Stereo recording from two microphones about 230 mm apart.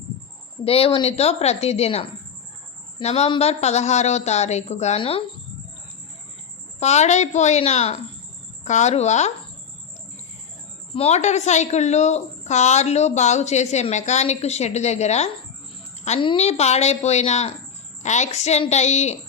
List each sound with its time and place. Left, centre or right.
0.6 s a woman's voice: left
6.7 s a woman's voice: left
10.9 s a woman's voice: left